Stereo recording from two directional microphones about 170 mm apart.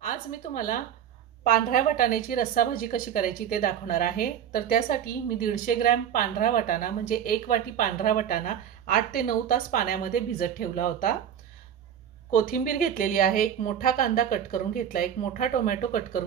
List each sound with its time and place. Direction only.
0.0 s a woman's voice: 55° left (ahead or behind)
12.3 s a woman's voice: 55° left (ahead or behind)